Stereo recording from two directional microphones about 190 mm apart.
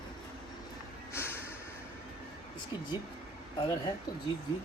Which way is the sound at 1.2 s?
10° left (ahead or behind).